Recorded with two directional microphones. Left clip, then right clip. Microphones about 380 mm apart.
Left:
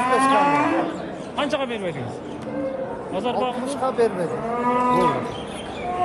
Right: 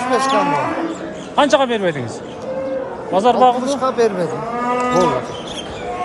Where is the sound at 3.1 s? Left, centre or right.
Centre.